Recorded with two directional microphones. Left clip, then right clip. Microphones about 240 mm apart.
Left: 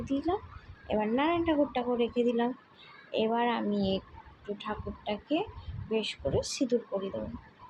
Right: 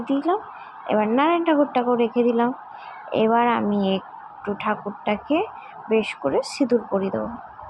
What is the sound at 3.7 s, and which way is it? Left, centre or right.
Speech, right.